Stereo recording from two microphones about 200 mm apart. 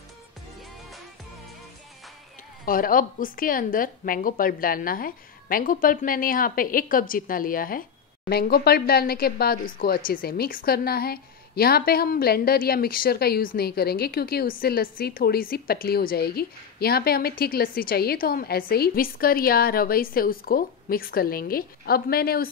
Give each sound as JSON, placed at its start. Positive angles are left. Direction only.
{"t": 2.6, "sound": "speech", "side_deg": 45}